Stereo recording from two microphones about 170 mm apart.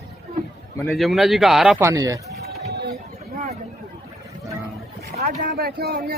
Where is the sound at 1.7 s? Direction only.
20° right (ahead or behind).